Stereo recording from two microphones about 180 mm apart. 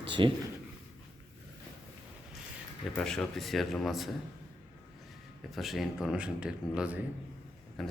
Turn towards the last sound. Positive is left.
turn(degrees=0)  # may be behind; listen again after turning